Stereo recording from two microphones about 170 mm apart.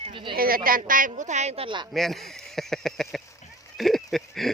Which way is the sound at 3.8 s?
Centre (ahead or behind).